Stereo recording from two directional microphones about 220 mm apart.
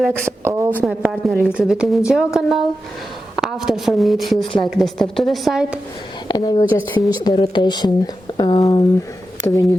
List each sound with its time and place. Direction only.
0.3 s a woman's voice: 10° right (ahead or behind)
6.2 s speech: 20° left (ahead or behind)